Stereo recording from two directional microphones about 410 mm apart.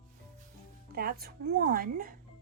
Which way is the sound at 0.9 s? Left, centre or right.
Right.